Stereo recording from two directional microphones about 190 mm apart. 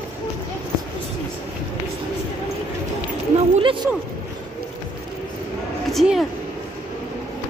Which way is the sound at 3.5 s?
25° right (ahead or behind).